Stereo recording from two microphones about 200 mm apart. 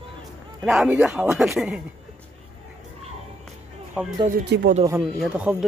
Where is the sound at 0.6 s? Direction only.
5° right (ahead or behind).